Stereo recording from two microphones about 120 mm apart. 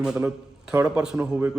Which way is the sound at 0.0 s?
5° right (ahead or behind).